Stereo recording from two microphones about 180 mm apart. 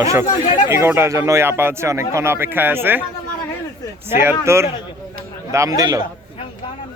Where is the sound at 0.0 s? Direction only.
15° right (ahead or behind).